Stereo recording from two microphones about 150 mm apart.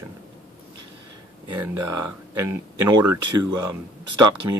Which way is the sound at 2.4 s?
25° right (ahead or behind).